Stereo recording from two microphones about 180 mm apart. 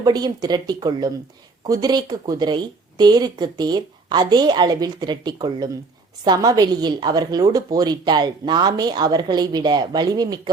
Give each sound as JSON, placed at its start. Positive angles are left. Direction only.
{"t": 0.0, "sound": "a woman's voice", "side_deg": -20}